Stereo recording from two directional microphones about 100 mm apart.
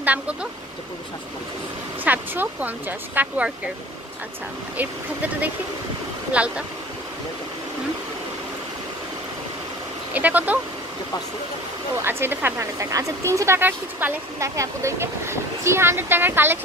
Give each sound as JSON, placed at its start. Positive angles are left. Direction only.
{"t": 0.0, "sound": "speech", "side_deg": -15}
{"t": 2.0, "sound": "speech", "side_deg": -15}
{"t": 4.7, "sound": "speech", "side_deg": -15}
{"t": 10.1, "sound": "speech", "side_deg": -15}
{"t": 12.0, "sound": "speech", "side_deg": -25}
{"t": 12.7, "sound": "speech", "side_deg": -30}
{"t": 14.4, "sound": "speech", "side_deg": -30}